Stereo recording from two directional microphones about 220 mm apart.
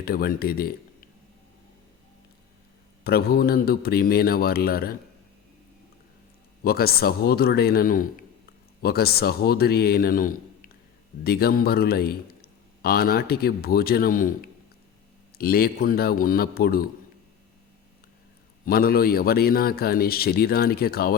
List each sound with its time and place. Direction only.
0.0 s a man's voice: 45° left (ahead or behind)
3.0 s a man's voice: 45° left (ahead or behind)
6.6 s a man's voice: 45° left (ahead or behind)
15.4 s a man's voice: 45° left (ahead or behind)
18.6 s a man's voice: 40° left (ahead or behind)